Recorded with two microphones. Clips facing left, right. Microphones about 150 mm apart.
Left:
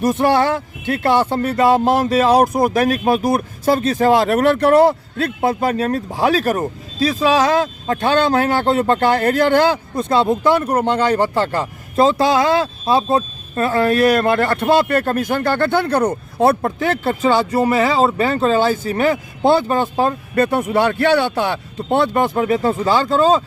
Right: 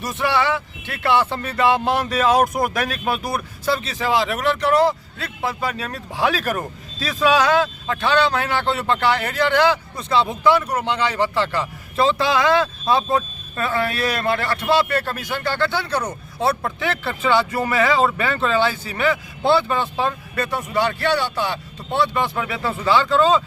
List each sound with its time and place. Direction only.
0.0 s speech: 50° left (ahead or behind)